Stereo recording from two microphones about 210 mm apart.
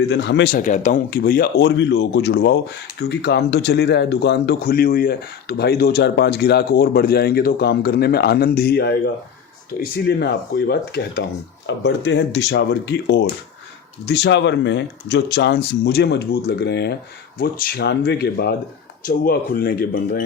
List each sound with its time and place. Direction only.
0.1 s speech: 55° left (ahead or behind)
10.1 s speech: 50° left (ahead or behind)